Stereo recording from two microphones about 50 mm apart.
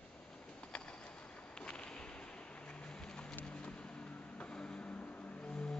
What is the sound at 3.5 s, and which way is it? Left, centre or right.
Vehicle, left.